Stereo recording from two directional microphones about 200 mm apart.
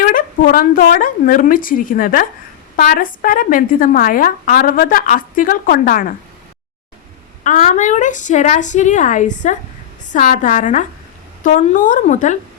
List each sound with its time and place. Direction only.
0.0 s a woman's voice: 45° left (ahead or behind)
7.4 s a woman's voice: 40° left (ahead or behind)